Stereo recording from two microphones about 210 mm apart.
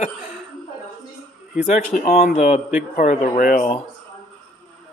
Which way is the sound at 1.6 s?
35° left (ahead or behind).